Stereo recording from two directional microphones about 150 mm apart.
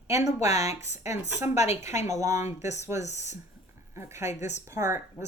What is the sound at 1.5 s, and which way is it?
Speech, 45° left (ahead or behind).